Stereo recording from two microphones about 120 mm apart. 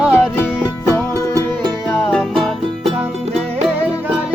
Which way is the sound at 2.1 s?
5° left (ahead or behind).